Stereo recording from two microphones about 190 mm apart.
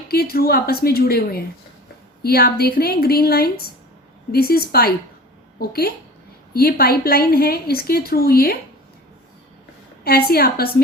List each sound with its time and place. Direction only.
0.1 s a woman's voice: 55° left (ahead or behind)
10.0 s a woman's voice: 55° left (ahead or behind)